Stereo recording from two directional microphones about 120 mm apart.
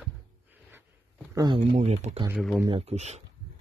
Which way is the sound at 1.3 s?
40° right (ahead or behind).